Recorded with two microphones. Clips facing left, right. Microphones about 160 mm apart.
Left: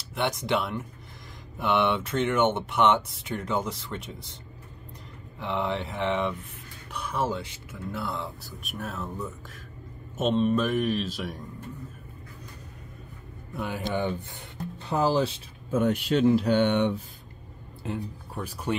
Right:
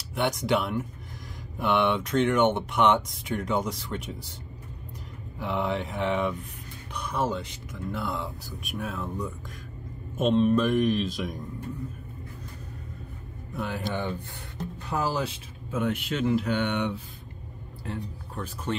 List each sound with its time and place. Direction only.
0.1 s speech: centre (ahead or behind)
5.4 s speech: centre (ahead or behind)
13.6 s speech: 5° left (ahead or behind)
14.8 s speech: 25° left (ahead or behind)
15.7 s speech: 40° left (ahead or behind)
17.8 s speech: 10° left (ahead or behind)